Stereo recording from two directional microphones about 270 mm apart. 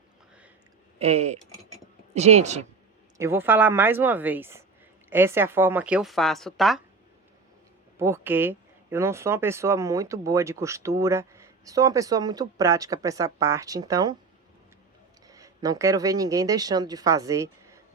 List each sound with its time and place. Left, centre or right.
0.9 s a woman's voice: right
3.2 s a woman's voice: centre
7.9 s speech: centre
15.3 s speech: centre